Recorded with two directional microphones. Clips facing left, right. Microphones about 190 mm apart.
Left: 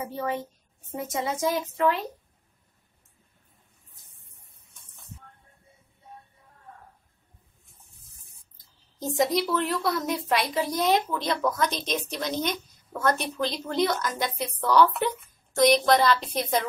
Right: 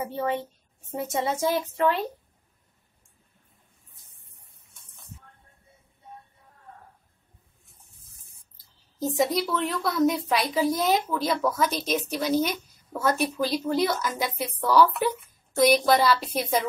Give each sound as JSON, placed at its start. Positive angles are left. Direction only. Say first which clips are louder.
{"t": 0.0, "sound": "speech", "louder": "right 2 dB", "side_deg": -25}
{"t": 9.0, "sound": "a woman's voice", "louder": "even", "side_deg": 0}